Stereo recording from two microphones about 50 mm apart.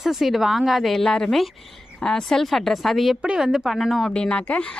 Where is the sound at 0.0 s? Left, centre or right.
Centre.